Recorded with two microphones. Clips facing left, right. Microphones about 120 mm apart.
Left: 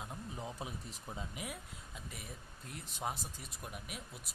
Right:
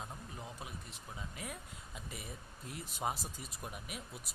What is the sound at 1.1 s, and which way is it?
Speech, 15° left (ahead or behind).